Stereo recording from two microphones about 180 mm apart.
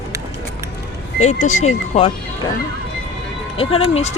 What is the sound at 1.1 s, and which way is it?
Speech, 40° left (ahead or behind).